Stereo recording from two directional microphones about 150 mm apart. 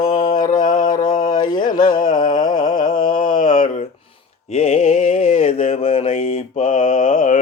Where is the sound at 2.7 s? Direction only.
65° left (ahead or behind).